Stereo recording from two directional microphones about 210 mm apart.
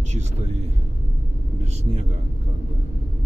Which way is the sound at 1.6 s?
30° right (ahead or behind).